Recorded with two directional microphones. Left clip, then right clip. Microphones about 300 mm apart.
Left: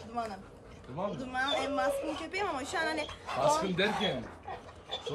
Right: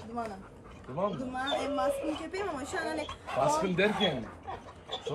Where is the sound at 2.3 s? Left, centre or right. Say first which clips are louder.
Left 1 dB; centre.